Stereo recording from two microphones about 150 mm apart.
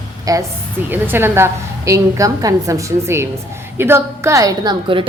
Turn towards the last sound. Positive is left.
turn(degrees=-35)  # may be behind; listen again after turning